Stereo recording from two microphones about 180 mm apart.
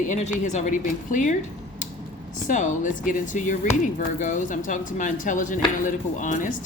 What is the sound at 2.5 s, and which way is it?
Speech, 45° left (ahead or behind).